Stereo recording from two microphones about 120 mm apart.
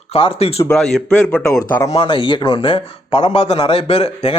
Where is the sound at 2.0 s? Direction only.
45° left (ahead or behind).